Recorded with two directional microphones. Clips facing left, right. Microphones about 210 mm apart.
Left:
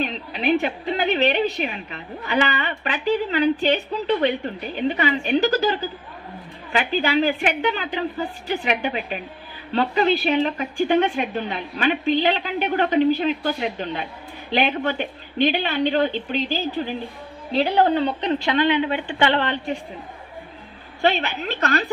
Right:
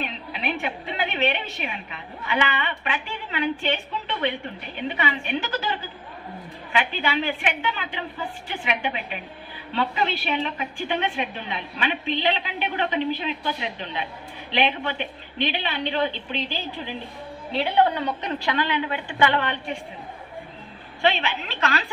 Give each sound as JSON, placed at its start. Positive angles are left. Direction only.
{"t": 0.0, "sound": "a woman's voice", "side_deg": 35}
{"t": 21.0, "sound": "a woman's voice", "side_deg": 45}